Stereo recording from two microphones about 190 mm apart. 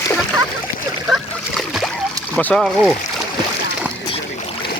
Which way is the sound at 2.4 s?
5° left (ahead or behind).